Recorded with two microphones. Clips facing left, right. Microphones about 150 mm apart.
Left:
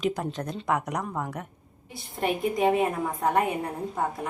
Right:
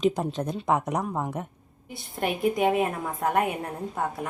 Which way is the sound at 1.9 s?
Centre (ahead or behind).